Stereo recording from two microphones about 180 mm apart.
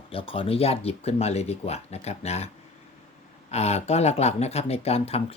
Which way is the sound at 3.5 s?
35° left (ahead or behind).